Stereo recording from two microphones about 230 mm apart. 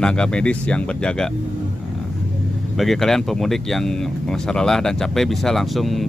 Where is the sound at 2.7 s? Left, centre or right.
Centre.